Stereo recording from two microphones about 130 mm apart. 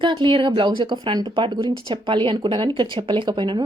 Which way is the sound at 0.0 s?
35° right (ahead or behind).